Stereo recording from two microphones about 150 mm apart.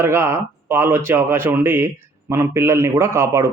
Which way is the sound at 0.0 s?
15° right (ahead or behind).